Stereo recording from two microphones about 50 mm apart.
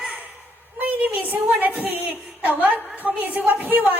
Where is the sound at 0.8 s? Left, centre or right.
Right.